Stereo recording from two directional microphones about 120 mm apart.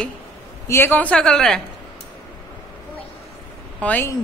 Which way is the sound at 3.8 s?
15° left (ahead or behind).